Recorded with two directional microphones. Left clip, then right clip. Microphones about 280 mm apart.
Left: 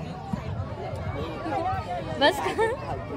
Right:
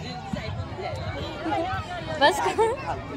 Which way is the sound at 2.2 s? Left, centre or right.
Centre.